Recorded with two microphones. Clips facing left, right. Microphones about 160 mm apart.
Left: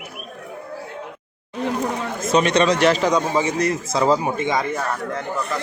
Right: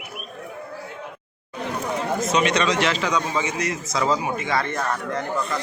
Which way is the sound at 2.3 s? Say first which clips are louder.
Left 6 dB; 35° left (ahead or behind).